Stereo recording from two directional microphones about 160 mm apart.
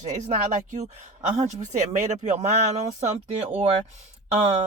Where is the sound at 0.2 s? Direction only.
45° right (ahead or behind).